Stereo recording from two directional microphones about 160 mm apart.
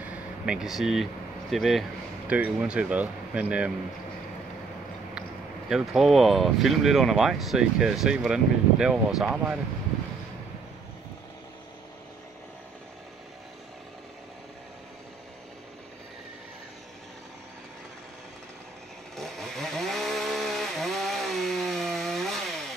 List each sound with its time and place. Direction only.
0.0 s a sound: 5° right (ahead or behind)
1.5 s speech: centre (ahead or behind)
5.7 s speech: centre (ahead or behind)
19.1 s chainsaw: centre (ahead or behind)